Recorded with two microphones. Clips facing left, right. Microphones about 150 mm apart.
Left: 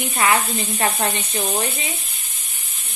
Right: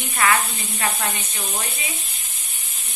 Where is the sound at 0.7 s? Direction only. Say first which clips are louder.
Left 3 dB; 35° left (ahead or behind).